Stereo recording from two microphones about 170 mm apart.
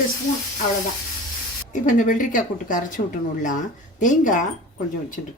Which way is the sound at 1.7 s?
50° left (ahead or behind).